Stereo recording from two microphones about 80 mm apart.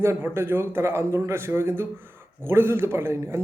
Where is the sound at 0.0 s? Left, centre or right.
Right.